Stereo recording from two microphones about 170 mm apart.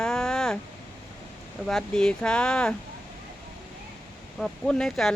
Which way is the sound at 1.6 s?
5° left (ahead or behind).